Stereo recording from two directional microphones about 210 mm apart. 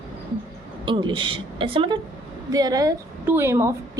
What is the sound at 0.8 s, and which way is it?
A woman's voice, 25° right (ahead or behind).